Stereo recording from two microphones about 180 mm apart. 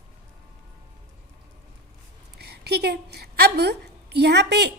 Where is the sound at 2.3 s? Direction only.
65° right (ahead or behind).